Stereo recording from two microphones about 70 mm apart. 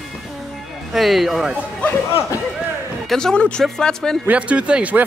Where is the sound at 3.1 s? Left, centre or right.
Centre.